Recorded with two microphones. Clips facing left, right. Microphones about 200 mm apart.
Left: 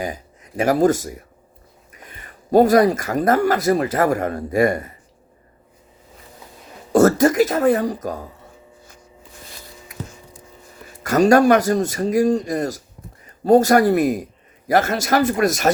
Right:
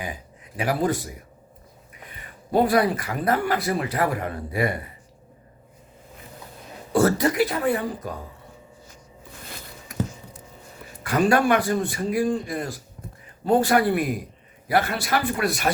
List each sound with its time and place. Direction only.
0.0 s speech: 45° left (ahead or behind)
2.5 s speech: 45° left (ahead or behind)
6.9 s speech: 45° left (ahead or behind)
11.0 s speech: 45° left (ahead or behind)